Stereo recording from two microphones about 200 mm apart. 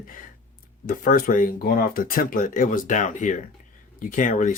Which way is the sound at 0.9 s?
45° left (ahead or behind).